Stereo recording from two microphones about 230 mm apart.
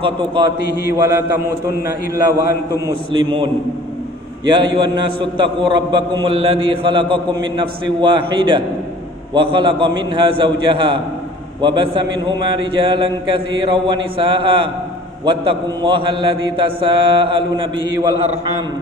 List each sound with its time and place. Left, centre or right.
0.0 s a man's voice: right
0.8 s a sound: centre
2.7 s a man's voice: centre
4.5 s a man's voice: centre